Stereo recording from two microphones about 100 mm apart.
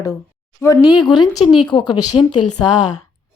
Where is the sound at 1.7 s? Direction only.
50° left (ahead or behind).